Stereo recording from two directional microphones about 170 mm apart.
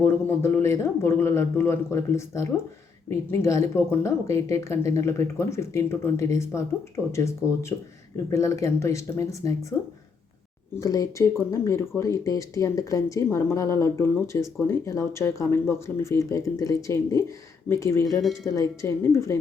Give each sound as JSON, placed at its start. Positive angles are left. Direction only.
{"t": 0.0, "sound": "speech", "side_deg": 15}
{"t": 10.8, "sound": "speech", "side_deg": 20}